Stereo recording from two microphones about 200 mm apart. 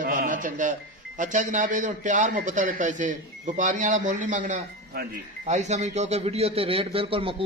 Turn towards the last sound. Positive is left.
turn(degrees=-25)  # may be behind; listen again after turning